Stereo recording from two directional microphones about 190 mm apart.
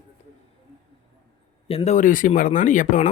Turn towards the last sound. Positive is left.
turn(degrees=40)  # may be behind; listen again after turning